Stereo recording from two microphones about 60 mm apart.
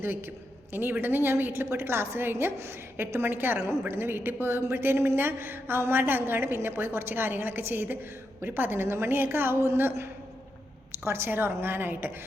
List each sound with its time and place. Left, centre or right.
0.0 s a woman's voice: right